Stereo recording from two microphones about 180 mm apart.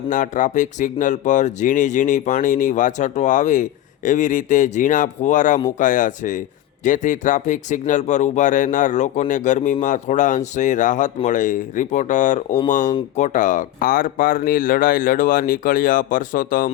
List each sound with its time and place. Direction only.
0.1 s speech: 45° left (ahead or behind)